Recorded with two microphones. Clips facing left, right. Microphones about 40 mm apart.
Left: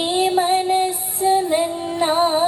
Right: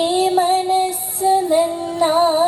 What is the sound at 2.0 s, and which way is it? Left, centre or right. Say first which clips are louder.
Music: right 3 dB; left.